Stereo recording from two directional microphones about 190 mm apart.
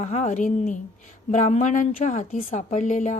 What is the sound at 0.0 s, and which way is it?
A woman's voice, 40° left (ahead or behind).